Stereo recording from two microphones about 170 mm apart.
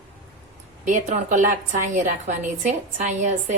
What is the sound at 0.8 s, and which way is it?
A woman's voice, 45° right (ahead or behind).